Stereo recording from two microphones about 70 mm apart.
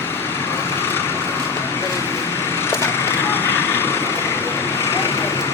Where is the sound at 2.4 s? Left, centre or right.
Left.